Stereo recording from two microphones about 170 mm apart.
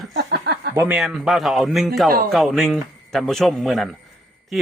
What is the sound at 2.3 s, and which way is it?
Speech, centre (ahead or behind).